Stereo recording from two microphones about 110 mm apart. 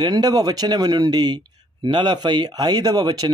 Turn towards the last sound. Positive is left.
turn(degrees=-35)  # may be behind; listen again after turning